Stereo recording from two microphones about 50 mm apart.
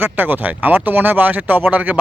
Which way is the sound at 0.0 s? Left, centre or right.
Right.